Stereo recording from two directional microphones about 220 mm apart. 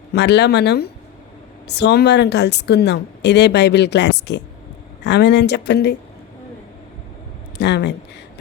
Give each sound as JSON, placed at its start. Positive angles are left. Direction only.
{"t": 0.1, "sound": "a woman's voice", "side_deg": 50}
{"t": 7.6, "sound": "speech", "side_deg": 50}